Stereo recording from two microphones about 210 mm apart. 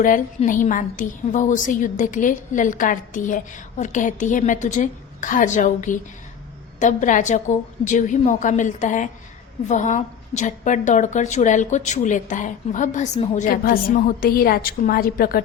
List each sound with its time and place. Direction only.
0.0 s a woman's voice: 40° left (ahead or behind)